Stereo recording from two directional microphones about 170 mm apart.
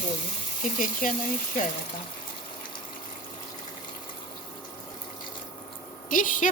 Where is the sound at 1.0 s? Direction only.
50° left (ahead or behind).